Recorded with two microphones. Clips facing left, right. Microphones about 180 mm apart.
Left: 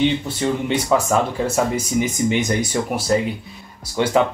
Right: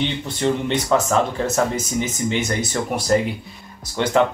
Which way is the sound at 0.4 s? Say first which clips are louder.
Right 3 dB; 10° left (ahead or behind).